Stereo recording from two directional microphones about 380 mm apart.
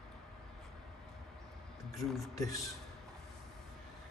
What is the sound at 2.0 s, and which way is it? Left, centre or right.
Speech, centre.